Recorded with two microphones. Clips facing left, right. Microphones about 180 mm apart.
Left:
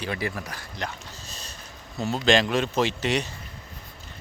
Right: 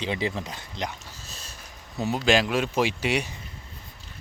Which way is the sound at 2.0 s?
10° right (ahead or behind).